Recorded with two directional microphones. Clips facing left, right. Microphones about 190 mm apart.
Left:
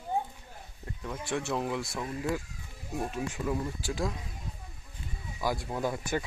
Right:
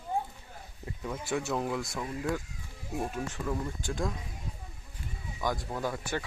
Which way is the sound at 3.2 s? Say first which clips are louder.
Left 2 dB; 10° left (ahead or behind).